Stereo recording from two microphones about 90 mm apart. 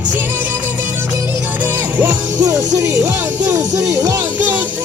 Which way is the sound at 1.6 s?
20° right (ahead or behind).